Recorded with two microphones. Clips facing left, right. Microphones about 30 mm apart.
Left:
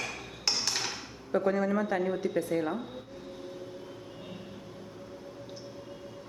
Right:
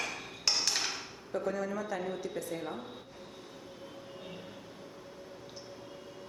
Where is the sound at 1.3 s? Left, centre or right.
Left.